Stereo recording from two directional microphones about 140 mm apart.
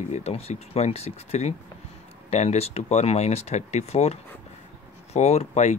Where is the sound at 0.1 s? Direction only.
50° left (ahead or behind).